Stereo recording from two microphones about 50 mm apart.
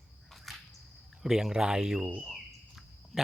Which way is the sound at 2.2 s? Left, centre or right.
Centre.